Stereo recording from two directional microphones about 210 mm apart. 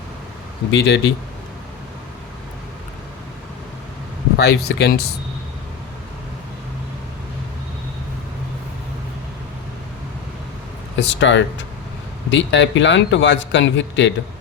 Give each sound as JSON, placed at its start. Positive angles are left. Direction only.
{"t": 0.7, "sound": "speech", "side_deg": 55}
{"t": 4.4, "sound": "speech", "side_deg": 50}
{"t": 10.9, "sound": "speech", "side_deg": 55}